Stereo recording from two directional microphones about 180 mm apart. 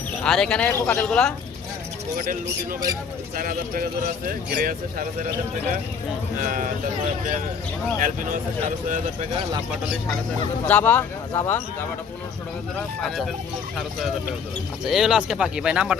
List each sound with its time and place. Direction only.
0.3 s speech: 5° left (ahead or behind)
2.1 s speech: 50° right (ahead or behind)
6.4 s speech: 50° right (ahead or behind)
7.9 s speech: 45° right (ahead or behind)
10.7 s speech: 10° left (ahead or behind)
13.0 s speech: centre (ahead or behind)
14.8 s speech: centre (ahead or behind)